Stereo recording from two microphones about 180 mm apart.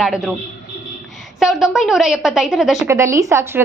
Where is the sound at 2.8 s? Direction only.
15° right (ahead or behind).